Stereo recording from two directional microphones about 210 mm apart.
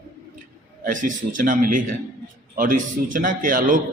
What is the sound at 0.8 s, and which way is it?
A man's voice, 40° right (ahead or behind).